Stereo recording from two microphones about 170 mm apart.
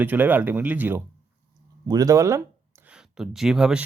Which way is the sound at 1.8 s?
20° right (ahead or behind).